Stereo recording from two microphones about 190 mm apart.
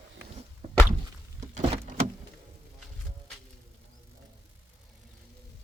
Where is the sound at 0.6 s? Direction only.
30° right (ahead or behind).